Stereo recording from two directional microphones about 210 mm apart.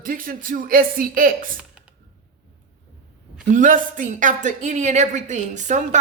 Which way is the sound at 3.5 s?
40° right (ahead or behind).